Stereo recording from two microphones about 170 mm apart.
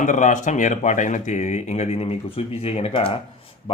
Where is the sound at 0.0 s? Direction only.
45° left (ahead or behind).